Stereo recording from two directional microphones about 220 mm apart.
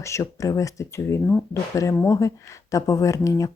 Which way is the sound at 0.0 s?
15° left (ahead or behind).